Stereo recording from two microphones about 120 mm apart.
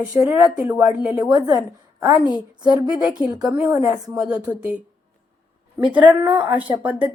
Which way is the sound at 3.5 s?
15° right (ahead or behind).